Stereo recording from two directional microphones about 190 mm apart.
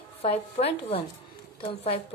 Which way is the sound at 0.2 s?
30° left (ahead or behind).